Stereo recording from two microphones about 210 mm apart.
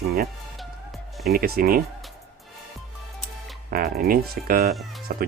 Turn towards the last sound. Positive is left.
turn(degrees=-40)  # may be behind; listen again after turning